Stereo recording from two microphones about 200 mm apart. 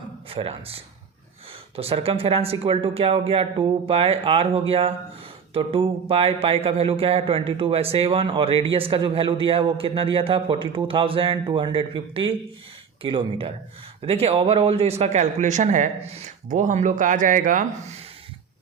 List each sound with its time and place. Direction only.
0.3 s speech: 30° right (ahead or behind)